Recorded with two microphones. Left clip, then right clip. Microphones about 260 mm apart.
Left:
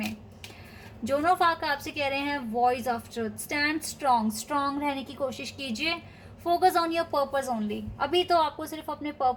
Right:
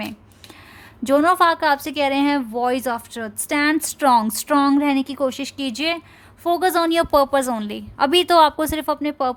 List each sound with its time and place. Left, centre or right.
1.0 s a woman's voice: right